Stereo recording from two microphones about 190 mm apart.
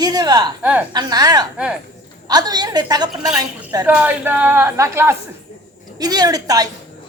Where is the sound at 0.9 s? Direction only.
20° right (ahead or behind).